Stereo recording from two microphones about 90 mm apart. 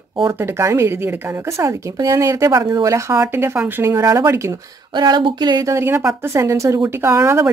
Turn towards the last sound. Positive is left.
turn(degrees=-30)  # may be behind; listen again after turning